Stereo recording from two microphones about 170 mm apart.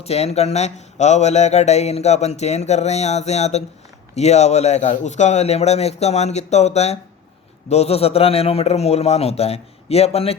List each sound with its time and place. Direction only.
0.0 s speech: 40° left (ahead or behind)